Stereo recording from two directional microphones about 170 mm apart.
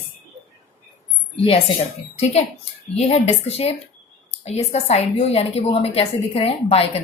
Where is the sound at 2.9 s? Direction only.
40° left (ahead or behind).